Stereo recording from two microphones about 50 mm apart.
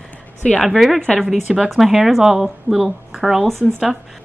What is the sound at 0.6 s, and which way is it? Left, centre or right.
Speech, centre.